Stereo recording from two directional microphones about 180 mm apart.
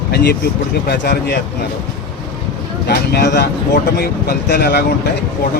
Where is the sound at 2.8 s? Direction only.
65° left (ahead or behind).